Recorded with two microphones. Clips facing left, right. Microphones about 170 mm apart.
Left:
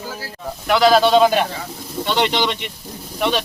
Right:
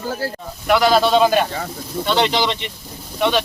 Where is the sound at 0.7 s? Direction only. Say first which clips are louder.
Left 1 dB; centre (ahead or behind).